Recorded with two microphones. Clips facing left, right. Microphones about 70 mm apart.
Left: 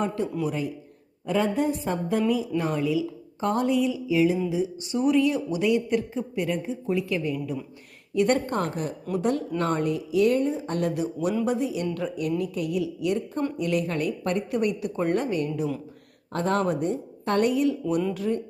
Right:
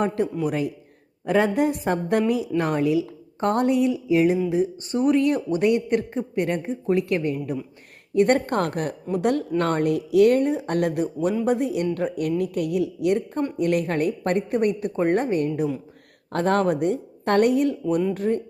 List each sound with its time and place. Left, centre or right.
0.4 s speech: right